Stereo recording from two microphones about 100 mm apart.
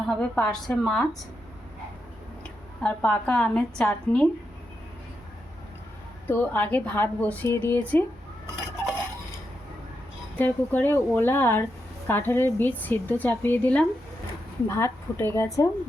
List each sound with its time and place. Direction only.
0.1 s a woman's voice: 10° left (ahead or behind)
2.8 s a woman's voice: 15° left (ahead or behind)
6.2 s a woman's voice: 20° left (ahead or behind)
10.3 s a woman's voice: 20° left (ahead or behind); by 15.7 s 35° left (ahead or behind)